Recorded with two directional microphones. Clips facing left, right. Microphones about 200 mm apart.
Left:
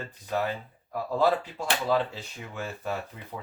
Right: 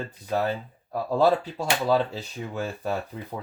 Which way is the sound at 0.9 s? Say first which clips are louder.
Right 4 dB; 35° right (ahead or behind).